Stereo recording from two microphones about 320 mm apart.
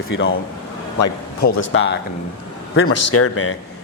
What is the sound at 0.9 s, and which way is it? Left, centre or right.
Speech, left.